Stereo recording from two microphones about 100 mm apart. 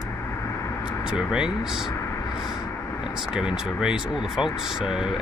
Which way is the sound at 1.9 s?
30° left (ahead or behind).